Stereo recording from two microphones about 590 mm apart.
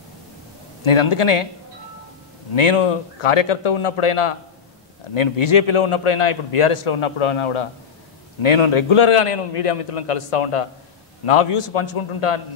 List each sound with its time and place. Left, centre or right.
0.8 s a man's voice: left
2.5 s a man's voice: left
5.4 s a man's voice: left